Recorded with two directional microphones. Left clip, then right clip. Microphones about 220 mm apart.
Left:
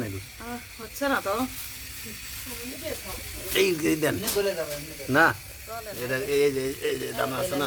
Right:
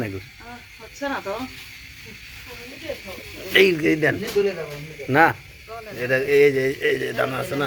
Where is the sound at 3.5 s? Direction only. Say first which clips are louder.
Right 7 dB; 5° right (ahead or behind).